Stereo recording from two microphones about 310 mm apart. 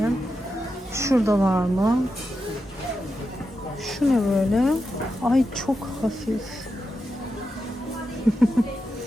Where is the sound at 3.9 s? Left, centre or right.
Centre.